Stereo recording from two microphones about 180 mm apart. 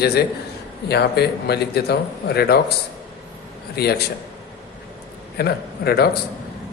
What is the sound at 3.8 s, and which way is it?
Speech, 60° left (ahead or behind).